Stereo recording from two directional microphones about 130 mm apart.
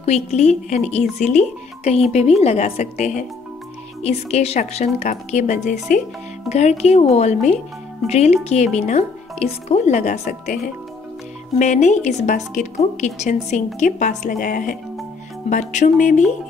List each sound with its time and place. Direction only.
0.0 s a woman's voice: 55° left (ahead or behind); by 6.0 s 75° left (ahead or behind)
6.5 s a woman's voice: 55° left (ahead or behind); by 14.8 s 90° left
15.5 s speech: 75° left (ahead or behind)